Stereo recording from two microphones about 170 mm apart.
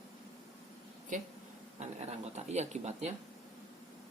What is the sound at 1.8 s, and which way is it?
Speech, 40° right (ahead or behind).